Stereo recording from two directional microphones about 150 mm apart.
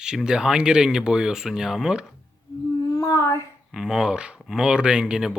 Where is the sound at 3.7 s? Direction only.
5° right (ahead or behind).